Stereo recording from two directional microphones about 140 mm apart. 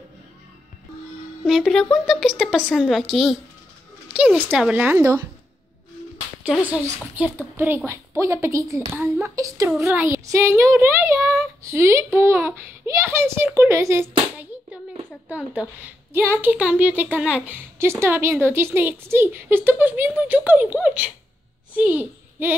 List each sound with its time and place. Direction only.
1.4 s a woman's voice: centre (ahead or behind)
4.9 s speech: 20° right (ahead or behind)
6.4 s a woman's voice: 10° right (ahead or behind)
15.2 s a woman's voice: 10° right (ahead or behind)